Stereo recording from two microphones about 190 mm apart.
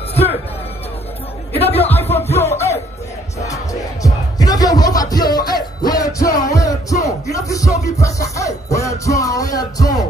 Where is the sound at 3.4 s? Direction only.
15° left (ahead or behind).